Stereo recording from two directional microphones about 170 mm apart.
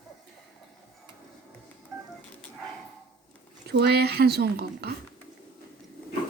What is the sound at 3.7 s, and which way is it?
A woman's voice, 70° right (ahead or behind).